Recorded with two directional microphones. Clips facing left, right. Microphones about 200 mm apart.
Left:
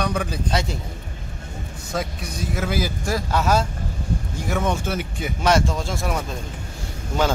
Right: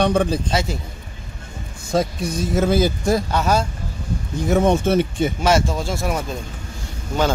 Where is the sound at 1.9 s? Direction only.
30° right (ahead or behind).